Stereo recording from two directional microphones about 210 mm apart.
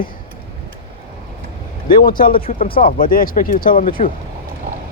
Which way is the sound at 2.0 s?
40° left (ahead or behind).